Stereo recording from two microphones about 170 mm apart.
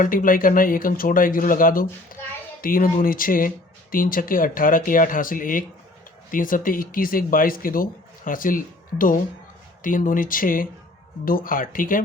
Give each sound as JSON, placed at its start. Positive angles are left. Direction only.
{"t": 0.0, "sound": "speech", "side_deg": 55}